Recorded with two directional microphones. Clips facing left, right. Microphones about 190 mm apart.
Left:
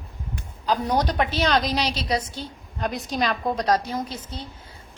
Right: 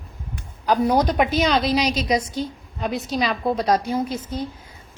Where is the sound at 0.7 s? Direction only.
10° right (ahead or behind).